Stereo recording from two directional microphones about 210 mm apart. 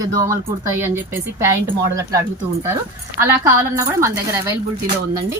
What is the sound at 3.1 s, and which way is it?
A woman's voice, 15° right (ahead or behind).